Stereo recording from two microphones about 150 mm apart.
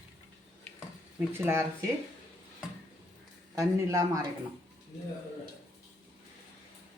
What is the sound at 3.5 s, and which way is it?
Speech, 20° right (ahead or behind).